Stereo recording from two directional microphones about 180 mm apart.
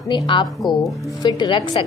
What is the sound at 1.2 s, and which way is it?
Speech, 25° left (ahead or behind).